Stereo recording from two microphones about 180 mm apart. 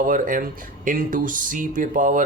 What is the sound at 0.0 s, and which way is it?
Speech, 50° right (ahead or behind).